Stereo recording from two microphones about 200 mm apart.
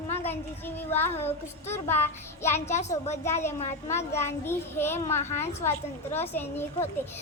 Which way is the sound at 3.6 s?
35° left (ahead or behind).